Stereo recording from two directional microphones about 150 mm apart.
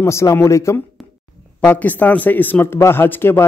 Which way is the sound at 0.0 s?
20° left (ahead or behind).